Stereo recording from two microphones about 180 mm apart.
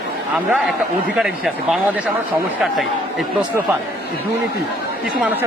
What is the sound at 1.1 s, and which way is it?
Speech, 5° right (ahead or behind).